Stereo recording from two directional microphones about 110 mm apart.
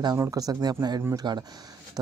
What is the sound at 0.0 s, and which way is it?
Speech, 35° right (ahead or behind).